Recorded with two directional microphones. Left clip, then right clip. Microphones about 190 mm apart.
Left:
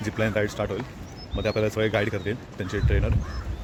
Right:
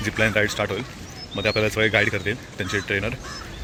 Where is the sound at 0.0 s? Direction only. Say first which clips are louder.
Right 5 dB; centre (ahead or behind).